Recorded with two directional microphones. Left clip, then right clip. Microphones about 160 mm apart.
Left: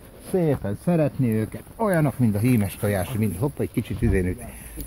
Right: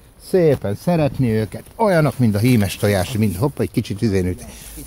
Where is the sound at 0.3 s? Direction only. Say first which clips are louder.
Right 8 dB; 60° right (ahead or behind).